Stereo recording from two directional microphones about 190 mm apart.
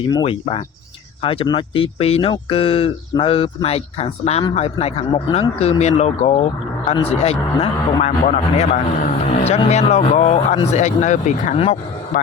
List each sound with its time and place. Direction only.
0.1 s speech: 25° left (ahead or behind)